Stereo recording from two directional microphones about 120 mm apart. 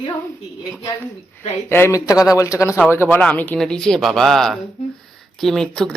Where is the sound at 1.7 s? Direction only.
20° left (ahead or behind).